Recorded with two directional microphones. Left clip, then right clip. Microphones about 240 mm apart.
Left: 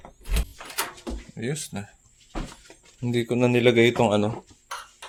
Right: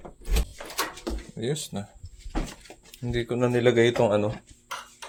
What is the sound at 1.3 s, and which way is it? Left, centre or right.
Speech, centre.